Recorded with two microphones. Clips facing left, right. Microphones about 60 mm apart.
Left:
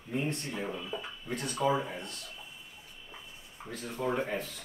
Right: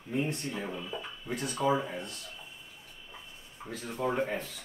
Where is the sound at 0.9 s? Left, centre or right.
Centre.